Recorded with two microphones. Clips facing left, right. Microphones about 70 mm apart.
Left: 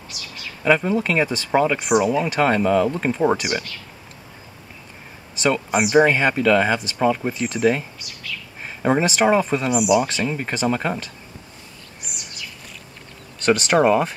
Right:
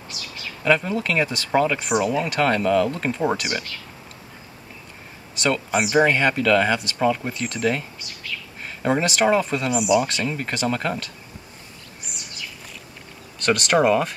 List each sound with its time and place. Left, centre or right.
0.7 s speech: centre
3.3 s speech: centre
5.4 s speech: centre
9.8 s speech: centre
13.5 s speech: centre